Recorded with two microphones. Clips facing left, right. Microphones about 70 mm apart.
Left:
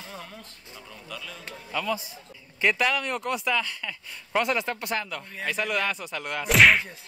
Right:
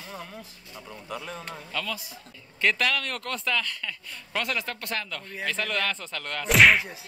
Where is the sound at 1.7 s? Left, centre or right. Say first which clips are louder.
Left 6 dB; centre.